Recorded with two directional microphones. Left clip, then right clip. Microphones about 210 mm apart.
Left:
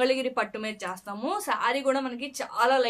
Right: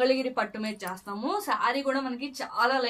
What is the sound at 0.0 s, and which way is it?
Speech, 40° left (ahead or behind).